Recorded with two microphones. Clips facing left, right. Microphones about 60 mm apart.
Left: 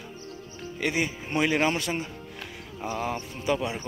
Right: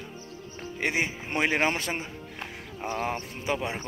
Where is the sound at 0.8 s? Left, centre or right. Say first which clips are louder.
Left 1 dB; right.